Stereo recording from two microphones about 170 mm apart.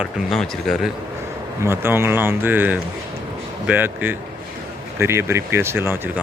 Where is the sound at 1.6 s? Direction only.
15° right (ahead or behind).